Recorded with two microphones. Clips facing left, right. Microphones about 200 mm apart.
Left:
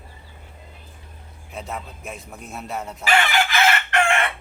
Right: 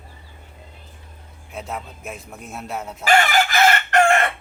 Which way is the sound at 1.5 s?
Centre (ahead or behind).